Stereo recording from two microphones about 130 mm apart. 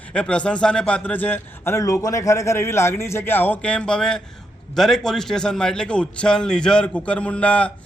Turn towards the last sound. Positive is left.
turn(degrees=10)  # may be behind; listen again after turning